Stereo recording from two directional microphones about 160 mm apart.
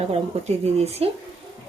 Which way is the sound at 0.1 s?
40° right (ahead or behind).